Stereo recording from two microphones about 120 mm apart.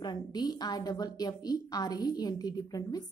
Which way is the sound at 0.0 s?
35° left (ahead or behind).